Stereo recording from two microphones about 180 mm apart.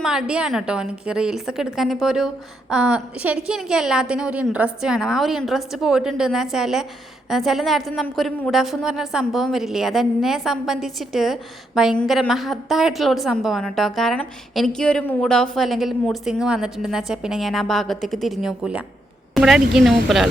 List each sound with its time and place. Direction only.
0.0 s a woman's voice: 5° right (ahead or behind)